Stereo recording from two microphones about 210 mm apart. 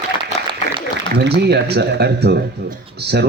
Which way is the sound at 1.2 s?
50° right (ahead or behind).